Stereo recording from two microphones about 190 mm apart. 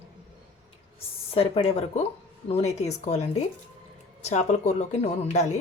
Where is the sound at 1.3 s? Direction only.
30° left (ahead or behind).